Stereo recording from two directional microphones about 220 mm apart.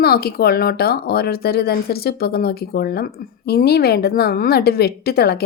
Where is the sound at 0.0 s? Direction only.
45° left (ahead or behind).